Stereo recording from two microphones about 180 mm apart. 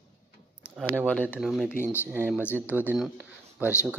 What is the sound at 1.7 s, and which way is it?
Speech, 15° left (ahead or behind).